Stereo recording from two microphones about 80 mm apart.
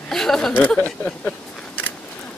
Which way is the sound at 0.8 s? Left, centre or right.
Centre.